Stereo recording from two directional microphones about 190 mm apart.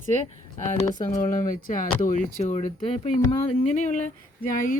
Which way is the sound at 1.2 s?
45° left (ahead or behind).